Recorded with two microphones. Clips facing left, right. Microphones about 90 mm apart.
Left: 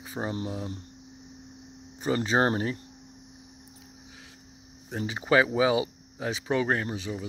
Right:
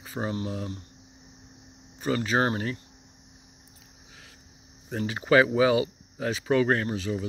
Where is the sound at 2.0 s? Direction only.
25° left (ahead or behind).